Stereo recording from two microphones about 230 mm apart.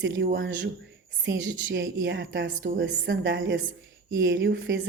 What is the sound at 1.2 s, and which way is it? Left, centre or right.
A woman's voice, right.